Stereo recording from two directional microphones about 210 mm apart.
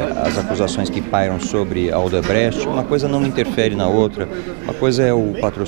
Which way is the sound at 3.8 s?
30° right (ahead or behind).